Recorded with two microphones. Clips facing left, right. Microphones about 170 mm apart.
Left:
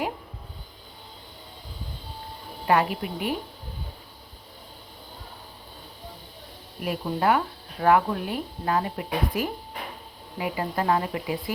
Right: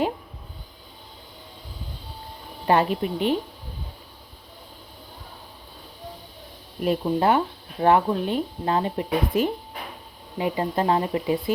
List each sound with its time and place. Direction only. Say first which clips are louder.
2.6 s speech: right 2 dB; 30° right (ahead or behind)
6.8 s speech: right 3 dB; 25° right (ahead or behind)